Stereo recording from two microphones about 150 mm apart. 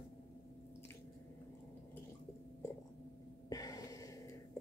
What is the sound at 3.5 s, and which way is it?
Gasp, 25° left (ahead or behind).